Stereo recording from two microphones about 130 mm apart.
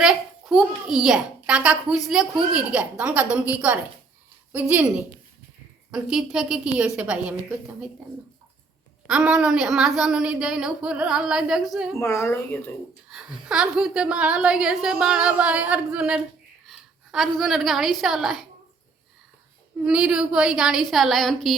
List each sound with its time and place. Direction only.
0.0 s a child's voice: 5° right (ahead or behind)
9.0 s a woman's voice: 10° right (ahead or behind)
11.9 s speech: 20° left (ahead or behind)
13.1 s a child's voice: 5° right (ahead or behind)
16.6 s a sound: centre (ahead or behind)
18.0 s a woman's voice: centre (ahead or behind)
19.8 s a woman's voice: 5° right (ahead or behind)